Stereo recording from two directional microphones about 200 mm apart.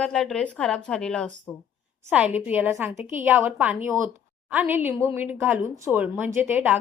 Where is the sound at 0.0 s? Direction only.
5° left (ahead or behind).